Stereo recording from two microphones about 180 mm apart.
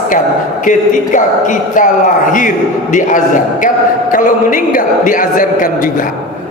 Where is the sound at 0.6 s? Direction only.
45° left (ahead or behind).